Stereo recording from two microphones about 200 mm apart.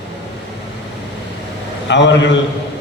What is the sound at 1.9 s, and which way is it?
Speech, 60° left (ahead or behind).